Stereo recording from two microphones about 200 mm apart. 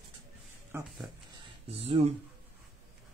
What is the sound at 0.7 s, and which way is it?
Speech, 10° right (ahead or behind).